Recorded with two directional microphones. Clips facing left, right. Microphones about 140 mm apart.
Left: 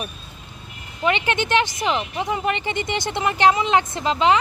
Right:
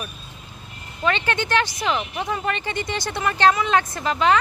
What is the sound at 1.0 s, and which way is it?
Speech, 15° left (ahead or behind).